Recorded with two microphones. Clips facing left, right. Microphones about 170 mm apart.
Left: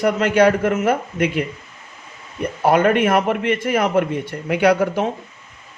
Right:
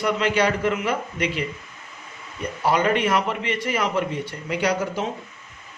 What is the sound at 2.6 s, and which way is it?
A man's voice, 50° left (ahead or behind).